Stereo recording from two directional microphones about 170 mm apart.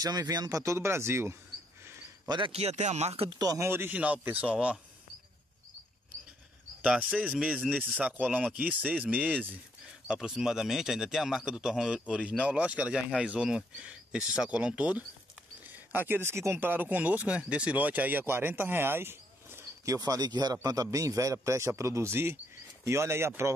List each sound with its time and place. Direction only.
0.0 s a man's voice: 25° right (ahead or behind)
1.9 s a man's voice: 25° right (ahead or behind); by 4.7 s 5° right (ahead or behind)
6.8 s a man's voice: 5° right (ahead or behind)